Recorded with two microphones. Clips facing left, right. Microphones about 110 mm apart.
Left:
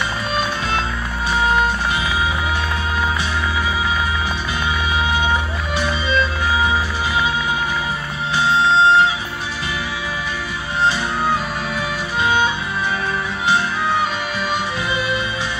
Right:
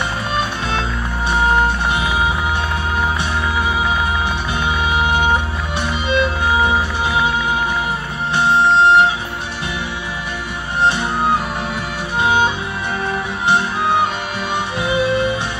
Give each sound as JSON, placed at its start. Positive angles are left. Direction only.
{"t": 4.9, "sound": "music", "side_deg": -60}
{"t": 5.9, "sound": "music", "side_deg": -20}
{"t": 12.2, "sound": "music", "side_deg": -60}